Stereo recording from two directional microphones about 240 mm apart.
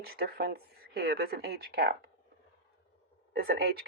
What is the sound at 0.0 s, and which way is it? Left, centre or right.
Speech, right.